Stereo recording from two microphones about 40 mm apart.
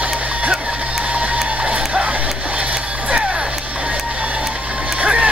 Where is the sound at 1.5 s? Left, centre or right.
Right.